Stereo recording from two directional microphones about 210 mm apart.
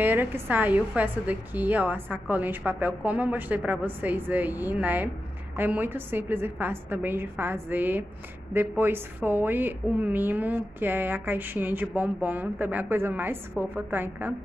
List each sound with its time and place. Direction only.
0.0 s a woman's voice: 10° right (ahead or behind)